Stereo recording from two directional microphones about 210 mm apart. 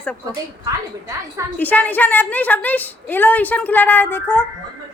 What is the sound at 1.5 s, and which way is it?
A woman's voice, 10° left (ahead or behind).